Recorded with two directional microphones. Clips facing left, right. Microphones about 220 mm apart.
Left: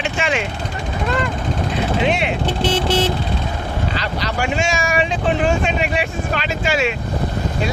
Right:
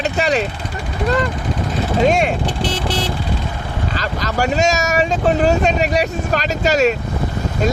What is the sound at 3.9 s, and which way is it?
Speech, 45° right (ahead or behind).